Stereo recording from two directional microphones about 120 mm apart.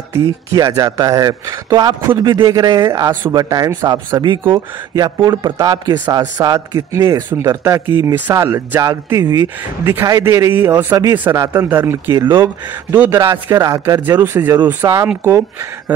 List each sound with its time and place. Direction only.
0.1 s a man's voice: 25° right (ahead or behind)
14.0 s speech: 20° right (ahead or behind)